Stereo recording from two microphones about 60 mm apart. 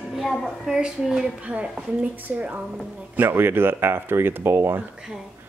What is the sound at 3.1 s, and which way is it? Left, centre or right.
Speech, right.